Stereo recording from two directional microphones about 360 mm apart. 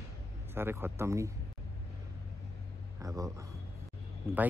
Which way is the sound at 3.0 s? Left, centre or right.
Centre.